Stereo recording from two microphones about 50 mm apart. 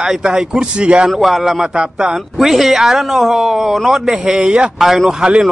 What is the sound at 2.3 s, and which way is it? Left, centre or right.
Speech, centre.